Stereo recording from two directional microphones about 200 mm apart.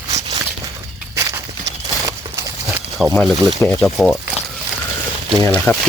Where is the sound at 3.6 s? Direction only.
10° left (ahead or behind).